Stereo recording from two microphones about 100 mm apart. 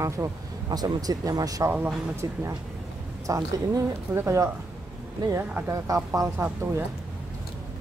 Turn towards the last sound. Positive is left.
turn(degrees=-20)  # may be behind; listen again after turning